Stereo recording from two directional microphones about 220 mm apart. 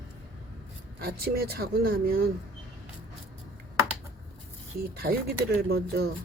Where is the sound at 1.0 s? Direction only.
45° right (ahead or behind).